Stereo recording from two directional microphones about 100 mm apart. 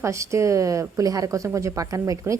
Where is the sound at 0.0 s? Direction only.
30° right (ahead or behind).